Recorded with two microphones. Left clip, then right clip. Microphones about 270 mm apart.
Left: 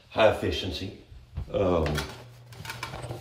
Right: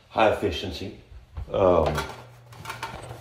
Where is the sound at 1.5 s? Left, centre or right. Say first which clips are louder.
Right 6 dB; centre.